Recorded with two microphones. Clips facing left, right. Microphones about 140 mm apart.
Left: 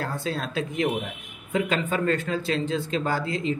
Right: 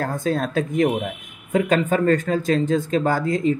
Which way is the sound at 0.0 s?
45° right (ahead or behind).